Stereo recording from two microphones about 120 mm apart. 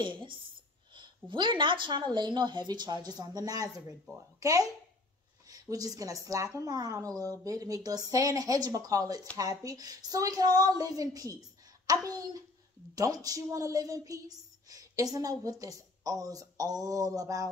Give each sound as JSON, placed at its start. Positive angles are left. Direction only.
{"t": 0.0, "sound": "a woman's voice", "side_deg": -45}